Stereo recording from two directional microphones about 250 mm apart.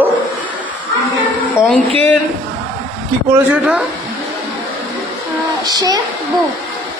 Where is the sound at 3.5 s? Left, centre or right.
Centre.